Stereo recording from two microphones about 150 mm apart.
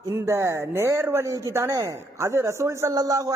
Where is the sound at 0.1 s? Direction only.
20° right (ahead or behind).